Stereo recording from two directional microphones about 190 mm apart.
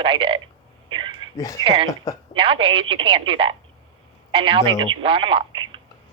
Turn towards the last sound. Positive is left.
turn(degrees=-25)  # may be behind; listen again after turning